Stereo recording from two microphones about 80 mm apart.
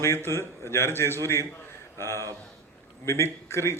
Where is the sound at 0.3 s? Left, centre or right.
Left.